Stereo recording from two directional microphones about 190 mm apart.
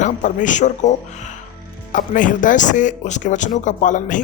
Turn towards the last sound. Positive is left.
turn(degrees=40)  # may be behind; listen again after turning